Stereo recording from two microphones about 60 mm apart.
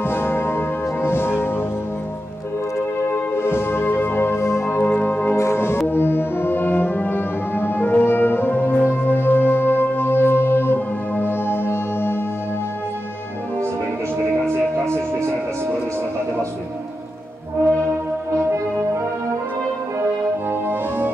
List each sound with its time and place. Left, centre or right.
0.0 s music: left
3.1 s music: left
4.8 s music: left
5.3 s music: left
5.9 s french horn: left
8.8 s music: left
14.9 s music: right